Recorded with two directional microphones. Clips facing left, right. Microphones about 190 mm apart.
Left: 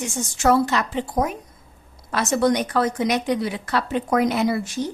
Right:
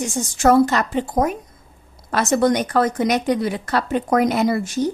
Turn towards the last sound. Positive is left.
turn(degrees=-45)  # may be behind; listen again after turning